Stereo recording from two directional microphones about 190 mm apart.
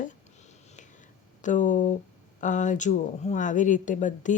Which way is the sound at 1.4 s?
40° left (ahead or behind).